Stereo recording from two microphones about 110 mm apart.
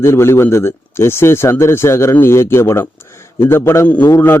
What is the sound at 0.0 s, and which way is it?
A man's voice, 25° left (ahead or behind).